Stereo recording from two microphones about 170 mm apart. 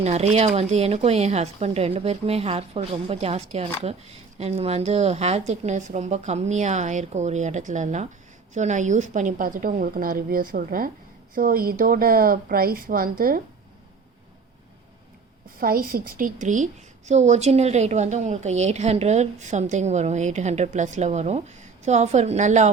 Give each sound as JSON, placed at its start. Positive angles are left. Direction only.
{"t": 0.0, "sound": "a woman's voice", "side_deg": -40}
{"t": 15.6, "sound": "a woman's voice", "side_deg": -60}